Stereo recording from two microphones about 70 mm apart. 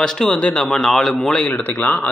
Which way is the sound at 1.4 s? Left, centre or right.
Left.